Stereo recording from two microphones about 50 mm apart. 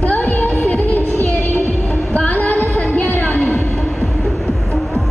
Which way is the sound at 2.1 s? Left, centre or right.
Left.